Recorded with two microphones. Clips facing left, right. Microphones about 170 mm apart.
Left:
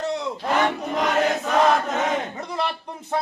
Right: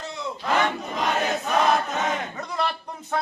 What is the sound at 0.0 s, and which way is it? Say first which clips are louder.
Battle cry: left 7 dB; 75° left (ahead or behind).